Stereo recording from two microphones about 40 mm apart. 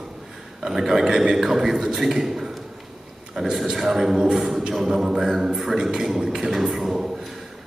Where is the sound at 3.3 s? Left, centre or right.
Centre.